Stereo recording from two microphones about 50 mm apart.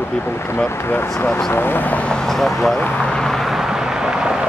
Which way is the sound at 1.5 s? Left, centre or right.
Left.